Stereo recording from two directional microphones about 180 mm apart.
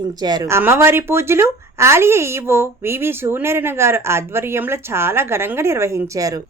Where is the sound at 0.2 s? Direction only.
20° right (ahead or behind).